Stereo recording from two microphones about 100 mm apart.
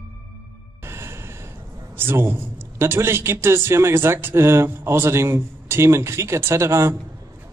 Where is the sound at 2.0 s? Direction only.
25° right (ahead or behind).